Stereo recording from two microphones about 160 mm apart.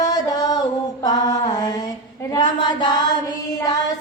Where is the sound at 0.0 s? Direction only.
25° left (ahead or behind).